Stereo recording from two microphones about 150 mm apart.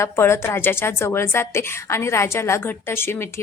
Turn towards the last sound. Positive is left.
turn(degrees=15)  # may be behind; listen again after turning